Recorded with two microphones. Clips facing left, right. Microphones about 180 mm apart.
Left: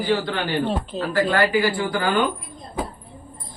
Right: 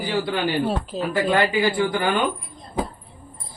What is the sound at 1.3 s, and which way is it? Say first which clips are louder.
Speech: right 1 dB; 20° right (ahead or behind).